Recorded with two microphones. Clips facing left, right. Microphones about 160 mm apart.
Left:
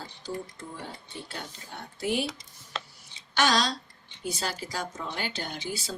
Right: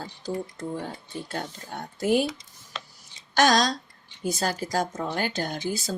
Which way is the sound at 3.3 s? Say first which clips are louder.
Right 5 dB; 45° right (ahead or behind).